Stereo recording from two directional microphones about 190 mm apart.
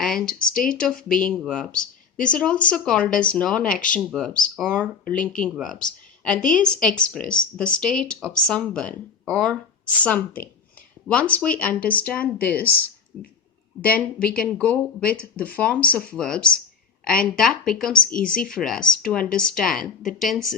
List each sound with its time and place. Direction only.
0.0 s speech: 5° left (ahead or behind)
5.1 s speech: 45° left (ahead or behind)
5.4 s speech: centre (ahead or behind)